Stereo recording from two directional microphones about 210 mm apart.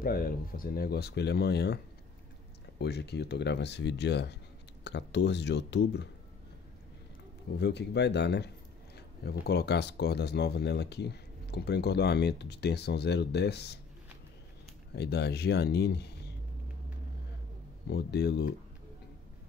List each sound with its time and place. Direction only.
0.0 s speech: 45° left (ahead or behind)
2.8 s speech: 50° left (ahead or behind)
7.5 s speech: 55° left (ahead or behind)
15.0 s speech: 50° left (ahead or behind)
17.8 s speech: 50° left (ahead or behind)